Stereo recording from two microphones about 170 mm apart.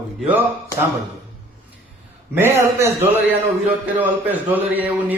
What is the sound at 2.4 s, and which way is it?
A man's voice, 15° right (ahead or behind).